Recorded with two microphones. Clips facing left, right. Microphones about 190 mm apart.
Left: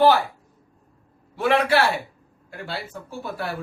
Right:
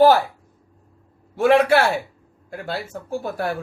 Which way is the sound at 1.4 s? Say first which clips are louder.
Right 4 dB; 50° right (ahead or behind).